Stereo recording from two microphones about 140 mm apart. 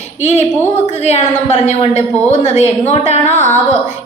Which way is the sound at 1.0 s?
55° left (ahead or behind).